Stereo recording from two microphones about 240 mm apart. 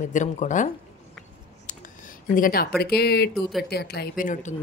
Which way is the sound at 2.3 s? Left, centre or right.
Left.